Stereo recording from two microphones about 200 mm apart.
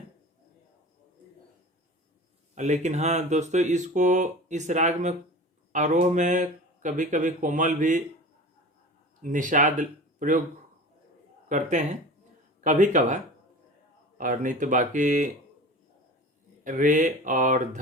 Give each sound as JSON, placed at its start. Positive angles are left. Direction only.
{"t": 2.6, "sound": "speech", "side_deg": -35}
{"t": 9.2, "sound": "speech", "side_deg": -40}
{"t": 11.4, "sound": "speech", "side_deg": -35}
{"t": 14.2, "sound": "speech", "side_deg": -40}
{"t": 16.6, "sound": "speech", "side_deg": -40}